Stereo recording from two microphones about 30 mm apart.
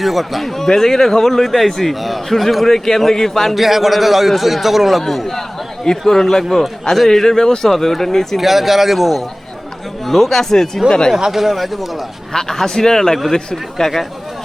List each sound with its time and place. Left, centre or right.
0.0 s a man's voice: centre
0.5 s a man's voice: centre
2.7 s speech: centre
3.5 s a man's voice: centre
5.8 s speech: centre
8.4 s a man's voice: centre
10.1 s speech: centre
10.8 s speech: left
11.3 s a man's voice: centre
12.3 s speech: centre